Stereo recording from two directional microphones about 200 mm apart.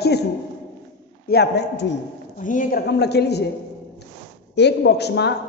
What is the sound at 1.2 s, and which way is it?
Speech, 55° left (ahead or behind).